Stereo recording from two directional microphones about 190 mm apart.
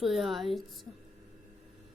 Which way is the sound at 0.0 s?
Centre (ahead or behind).